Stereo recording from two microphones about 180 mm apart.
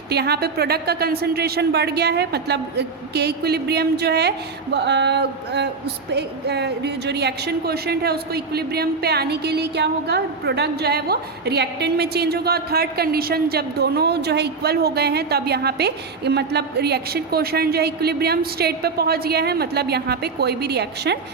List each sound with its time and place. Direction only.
0.1 s a woman's voice: 65° right (ahead or behind)